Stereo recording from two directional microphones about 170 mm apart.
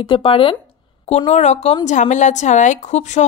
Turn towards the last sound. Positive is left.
turn(degrees=45)  # may be behind; listen again after turning